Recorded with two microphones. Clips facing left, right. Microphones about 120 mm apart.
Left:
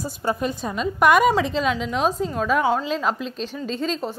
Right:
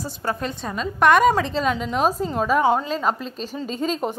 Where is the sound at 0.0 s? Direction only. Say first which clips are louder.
Left 2 dB; 15° left (ahead or behind).